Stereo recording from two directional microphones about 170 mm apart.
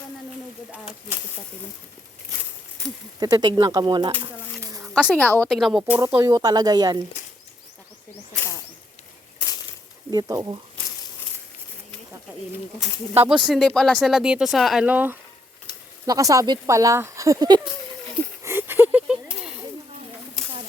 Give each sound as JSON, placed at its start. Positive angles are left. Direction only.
{"t": 2.8, "sound": "speech", "side_deg": -20}
{"t": 4.6, "sound": "a sound", "side_deg": -20}
{"t": 5.0, "sound": "a woman's voice", "side_deg": 10}
{"t": 6.1, "sound": "speech", "side_deg": -15}
{"t": 10.1, "sound": "speech", "side_deg": -20}
{"t": 13.1, "sound": "speech", "side_deg": -5}
{"t": 18.4, "sound": "a sound", "side_deg": -15}